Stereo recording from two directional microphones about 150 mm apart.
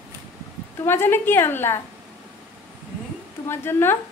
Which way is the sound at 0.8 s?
15° left (ahead or behind).